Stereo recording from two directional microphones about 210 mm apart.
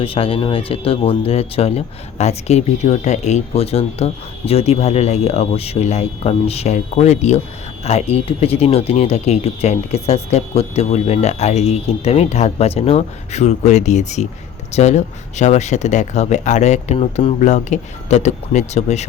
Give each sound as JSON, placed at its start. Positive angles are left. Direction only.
{"t": 0.0, "sound": "speech", "side_deg": 25}